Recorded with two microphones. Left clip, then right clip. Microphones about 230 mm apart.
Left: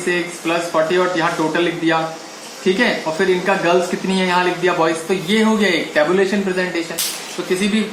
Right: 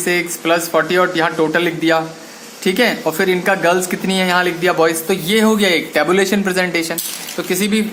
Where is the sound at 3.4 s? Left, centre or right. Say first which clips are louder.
Right 1 dB; right.